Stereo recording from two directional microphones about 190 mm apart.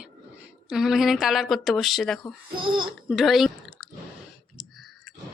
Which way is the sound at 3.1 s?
Centre (ahead or behind).